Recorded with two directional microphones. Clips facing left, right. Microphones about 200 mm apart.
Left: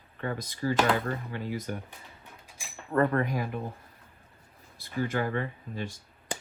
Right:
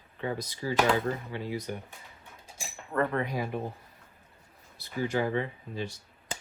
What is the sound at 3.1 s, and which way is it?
Speech, 45° left (ahead or behind).